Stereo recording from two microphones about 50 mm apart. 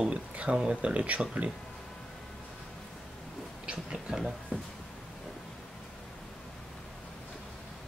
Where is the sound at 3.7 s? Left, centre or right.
Centre.